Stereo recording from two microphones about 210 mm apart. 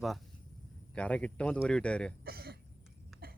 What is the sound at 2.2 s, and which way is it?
Cough, 45° right (ahead or behind).